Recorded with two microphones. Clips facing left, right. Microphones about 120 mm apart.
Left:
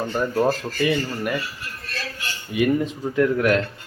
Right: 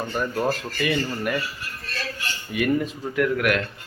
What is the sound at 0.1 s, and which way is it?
Speech, 20° left (ahead or behind).